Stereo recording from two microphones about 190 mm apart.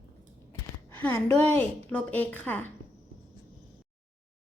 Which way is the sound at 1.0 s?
10° left (ahead or behind).